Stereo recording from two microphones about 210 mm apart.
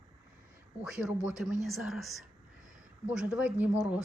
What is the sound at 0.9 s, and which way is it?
Speech, 5° right (ahead or behind).